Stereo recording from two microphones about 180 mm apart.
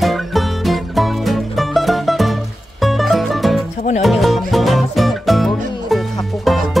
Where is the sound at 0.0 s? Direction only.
Centre (ahead or behind).